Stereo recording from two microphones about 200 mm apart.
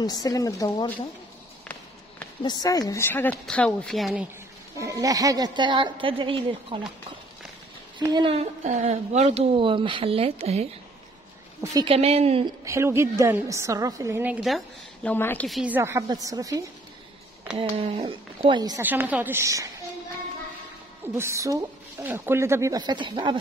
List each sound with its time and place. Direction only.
0.0 s a woman's voice: 20° left (ahead or behind)
2.4 s a woman's voice: 20° left (ahead or behind); by 4.3 s centre (ahead or behind)
4.7 s a woman's voice: 15° right (ahead or behind)
8.0 s a woman's voice: 20° right (ahead or behind)
11.6 s a woman's voice: 15° right (ahead or behind)
11.9 s a woman's voice: 30° right (ahead or behind)
12.6 s a woman's voice: 15° right (ahead or behind)
15.0 s a woman's voice: 10° left (ahead or behind)
15.4 s a woman's voice: 5° right (ahead or behind)
17.6 s a woman's voice: 30° right (ahead or behind)
18.9 s a woman's voice: 10° right (ahead or behind)
21.0 s a woman's voice: 15° right (ahead or behind)